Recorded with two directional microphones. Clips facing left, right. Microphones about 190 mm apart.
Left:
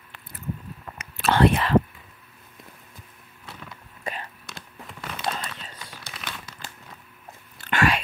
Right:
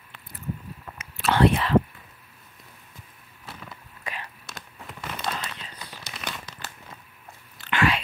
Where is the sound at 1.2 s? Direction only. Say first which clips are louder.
Left 1 dB; 50° left (ahead or behind).